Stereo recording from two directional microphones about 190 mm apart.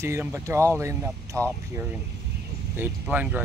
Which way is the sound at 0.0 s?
15° right (ahead or behind).